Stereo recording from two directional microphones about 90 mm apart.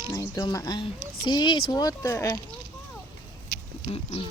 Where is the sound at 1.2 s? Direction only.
55° left (ahead or behind).